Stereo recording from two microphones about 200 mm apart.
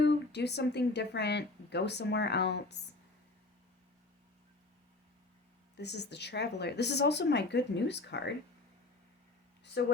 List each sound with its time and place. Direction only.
0.0 s speech: 60° left (ahead or behind)
5.7 s speech: 55° left (ahead or behind)
9.8 s speech: 55° left (ahead or behind)